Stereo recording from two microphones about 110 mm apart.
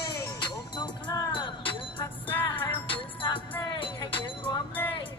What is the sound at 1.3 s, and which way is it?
Music, 50° left (ahead or behind).